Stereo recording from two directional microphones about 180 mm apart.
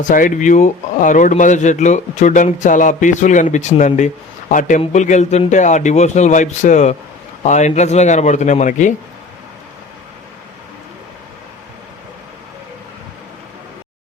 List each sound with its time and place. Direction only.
0.1 s speech: 50° left (ahead or behind)